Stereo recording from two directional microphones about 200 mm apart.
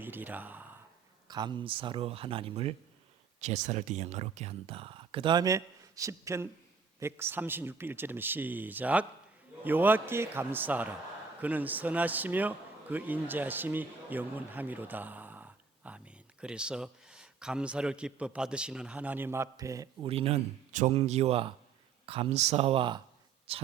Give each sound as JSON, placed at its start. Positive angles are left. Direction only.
{"t": 0.0, "sound": "speech", "side_deg": -10}
{"t": 1.3, "sound": "a man's voice", "side_deg": -20}
{"t": 20.1, "sound": "speech", "side_deg": -30}